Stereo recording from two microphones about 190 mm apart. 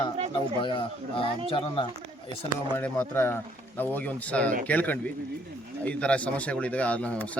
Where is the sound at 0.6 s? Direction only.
25° left (ahead or behind).